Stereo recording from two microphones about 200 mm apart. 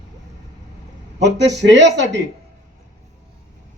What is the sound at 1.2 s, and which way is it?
A man's voice, 60° right (ahead or behind).